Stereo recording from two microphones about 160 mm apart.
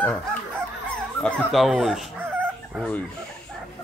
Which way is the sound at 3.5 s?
Centre (ahead or behind).